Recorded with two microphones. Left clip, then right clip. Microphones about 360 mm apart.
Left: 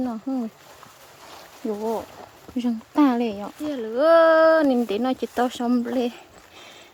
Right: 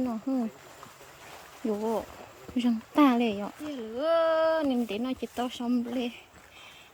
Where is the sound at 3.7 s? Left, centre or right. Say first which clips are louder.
Left 10 dB; centre.